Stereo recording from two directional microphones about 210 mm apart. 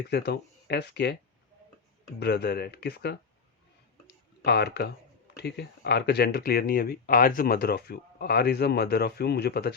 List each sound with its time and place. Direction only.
0.1 s speech: 55° left (ahead or behind)
2.1 s speech: 50° left (ahead or behind)
4.0 s tick-tock: 50° left (ahead or behind)
5.4 s speech: 50° left (ahead or behind)